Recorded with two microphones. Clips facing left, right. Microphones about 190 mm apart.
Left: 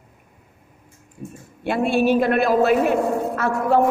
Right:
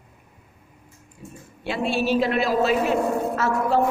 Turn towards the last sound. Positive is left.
turn(degrees=55)  # may be behind; listen again after turning